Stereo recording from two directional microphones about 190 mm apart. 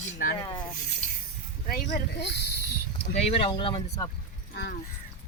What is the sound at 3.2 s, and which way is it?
Speech, 30° left (ahead or behind).